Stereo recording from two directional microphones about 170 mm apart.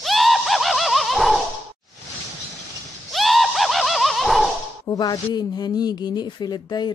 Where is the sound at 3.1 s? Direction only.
Centre (ahead or behind).